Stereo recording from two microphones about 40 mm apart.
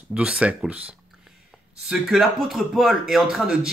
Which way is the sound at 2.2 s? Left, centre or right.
Centre.